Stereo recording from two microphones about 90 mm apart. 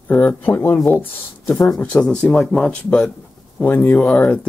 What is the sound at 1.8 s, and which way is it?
Speech, 15° left (ahead or behind).